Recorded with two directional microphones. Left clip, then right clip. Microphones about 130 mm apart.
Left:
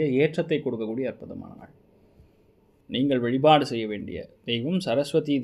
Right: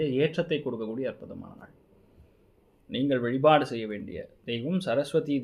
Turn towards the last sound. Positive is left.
turn(degrees=20)  # may be behind; listen again after turning